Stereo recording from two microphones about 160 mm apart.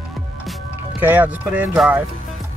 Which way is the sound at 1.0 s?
10° right (ahead or behind).